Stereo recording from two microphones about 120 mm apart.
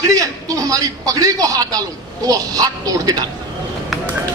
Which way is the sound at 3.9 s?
Centre (ahead or behind).